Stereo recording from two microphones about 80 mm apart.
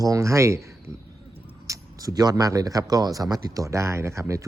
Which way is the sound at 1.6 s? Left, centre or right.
Right.